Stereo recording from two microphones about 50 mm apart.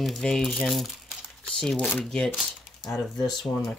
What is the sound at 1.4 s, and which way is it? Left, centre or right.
Speech, centre.